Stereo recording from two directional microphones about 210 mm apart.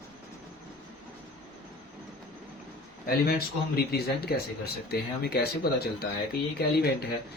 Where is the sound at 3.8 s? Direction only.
50° left (ahead or behind).